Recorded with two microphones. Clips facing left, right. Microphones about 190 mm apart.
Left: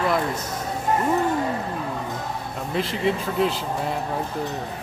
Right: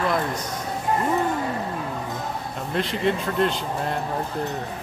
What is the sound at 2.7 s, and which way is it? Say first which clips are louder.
Speech: even; centre (ahead or behind).